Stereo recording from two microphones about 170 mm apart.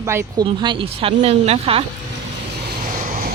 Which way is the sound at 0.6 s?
30° right (ahead or behind).